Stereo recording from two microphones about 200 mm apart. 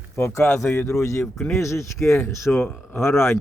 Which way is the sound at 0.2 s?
10° left (ahead or behind).